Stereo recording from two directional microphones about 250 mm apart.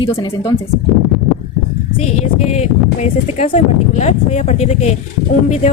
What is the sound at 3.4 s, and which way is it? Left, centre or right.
Speech, left.